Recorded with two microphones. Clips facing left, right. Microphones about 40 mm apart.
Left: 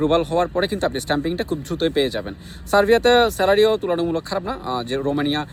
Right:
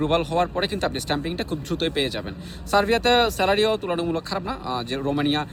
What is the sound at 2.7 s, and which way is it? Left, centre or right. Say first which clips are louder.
Speech: left 4 dB; left.